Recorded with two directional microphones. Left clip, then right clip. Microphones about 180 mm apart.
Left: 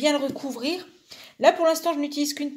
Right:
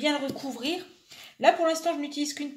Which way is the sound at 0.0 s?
40° left (ahead or behind).